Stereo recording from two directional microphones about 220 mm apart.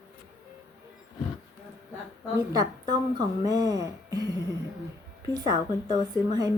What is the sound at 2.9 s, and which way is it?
A woman's voice, 20° right (ahead or behind).